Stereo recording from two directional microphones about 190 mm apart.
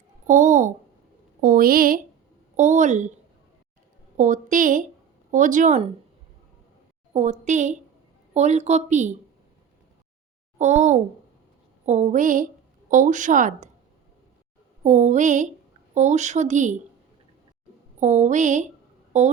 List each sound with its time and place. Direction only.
0.3 s a sound: 40° right (ahead or behind)
1.4 s a woman's voice: 45° right (ahead or behind)
4.2 s a woman's voice: 45° right (ahead or behind)
7.1 s a woman's voice: 40° right (ahead or behind)
10.6 s a woman's voice: 40° right (ahead or behind)
14.8 s a woman's voice: 40° right (ahead or behind)
18.0 s a woman's voice: 40° right (ahead or behind)